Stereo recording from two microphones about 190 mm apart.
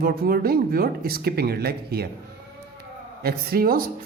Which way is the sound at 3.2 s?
50° right (ahead or behind).